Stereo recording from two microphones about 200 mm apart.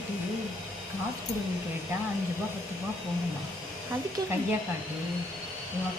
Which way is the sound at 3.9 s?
10° right (ahead or behind).